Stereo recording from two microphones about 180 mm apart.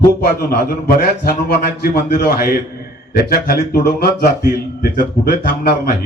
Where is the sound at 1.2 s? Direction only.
60° left (ahead or behind).